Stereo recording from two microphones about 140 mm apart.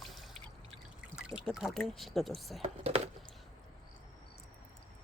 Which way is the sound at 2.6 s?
45° right (ahead or behind).